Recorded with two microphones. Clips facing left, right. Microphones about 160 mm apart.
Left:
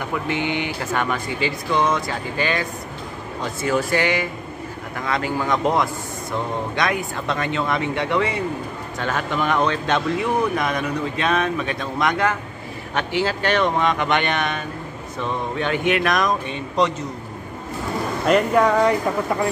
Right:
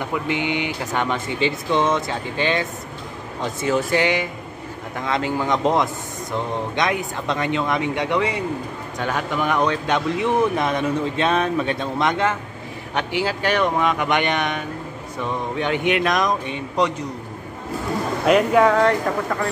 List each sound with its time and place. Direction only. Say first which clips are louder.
0.1 s speech: left 1 dB; 15° right (ahead or behind)
3.6 s speech: right 1 dB; 20° right (ahead or behind)
10.5 s speech: right 2 dB; 30° right (ahead or behind)
12.9 s speech: left 1 dB; 15° right (ahead or behind)
18.2 s speech: right 1 dB; 5° right (ahead or behind)